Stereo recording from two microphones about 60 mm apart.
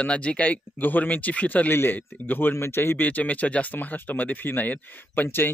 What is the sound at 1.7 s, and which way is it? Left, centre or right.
Speech, left.